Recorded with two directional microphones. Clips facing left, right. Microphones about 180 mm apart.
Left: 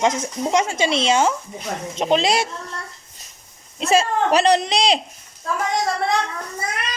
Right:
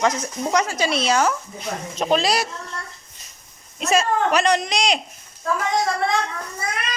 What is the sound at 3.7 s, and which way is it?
Speech, 30° left (ahead or behind).